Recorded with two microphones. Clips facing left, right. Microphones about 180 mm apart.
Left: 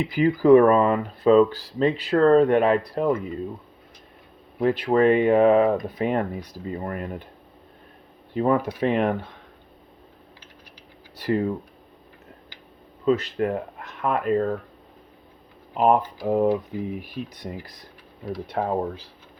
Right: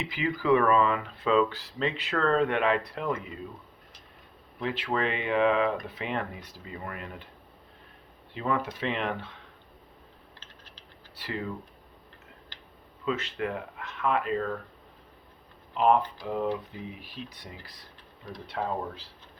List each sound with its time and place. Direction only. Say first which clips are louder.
0.0 s speech: left 10 dB; 40° left (ahead or behind)
4.6 s speech: left 11 dB; 45° left (ahead or behind)
8.3 s speech: left 8 dB; 45° left (ahead or behind)
11.2 s speech: left 11 dB; 45° left (ahead or behind)
13.1 s speech: left 9 dB; 40° left (ahead or behind)
15.7 s speech: left 4 dB; 45° left (ahead or behind)